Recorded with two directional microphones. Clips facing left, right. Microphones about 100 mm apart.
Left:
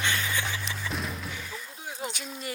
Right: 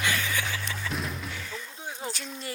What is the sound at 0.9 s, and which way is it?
Music, centre (ahead or behind).